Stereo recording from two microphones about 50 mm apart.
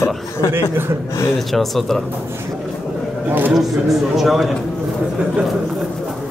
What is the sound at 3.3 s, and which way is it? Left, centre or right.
Speech, right.